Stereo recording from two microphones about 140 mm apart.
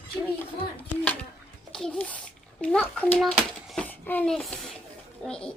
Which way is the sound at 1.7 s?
5° left (ahead or behind).